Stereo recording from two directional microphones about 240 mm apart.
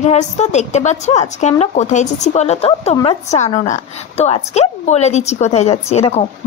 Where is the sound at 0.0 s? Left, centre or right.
Left.